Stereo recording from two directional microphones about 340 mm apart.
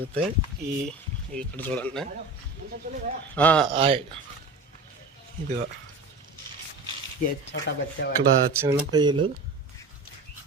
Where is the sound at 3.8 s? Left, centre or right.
Centre.